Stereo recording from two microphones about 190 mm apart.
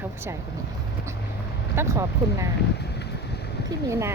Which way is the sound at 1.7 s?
15° right (ahead or behind).